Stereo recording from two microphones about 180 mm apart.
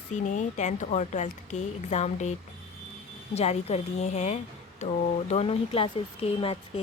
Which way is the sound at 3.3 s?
35° left (ahead or behind).